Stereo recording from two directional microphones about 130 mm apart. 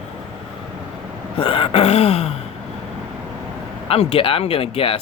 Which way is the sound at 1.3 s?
45° left (ahead or behind).